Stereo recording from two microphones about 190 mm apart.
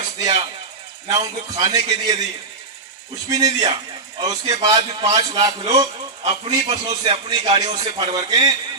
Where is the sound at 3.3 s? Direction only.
20° right (ahead or behind).